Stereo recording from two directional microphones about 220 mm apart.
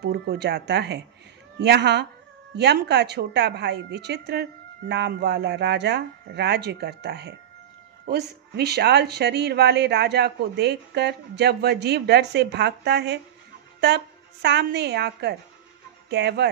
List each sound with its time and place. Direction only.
0.0 s a woman's voice: 45° right (ahead or behind)